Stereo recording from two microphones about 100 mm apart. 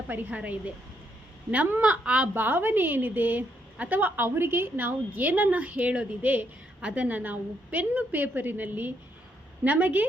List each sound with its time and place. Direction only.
0.1 s a woman's voice: 15° right (ahead or behind)